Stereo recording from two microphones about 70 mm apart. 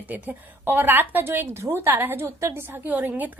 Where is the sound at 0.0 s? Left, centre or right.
Right.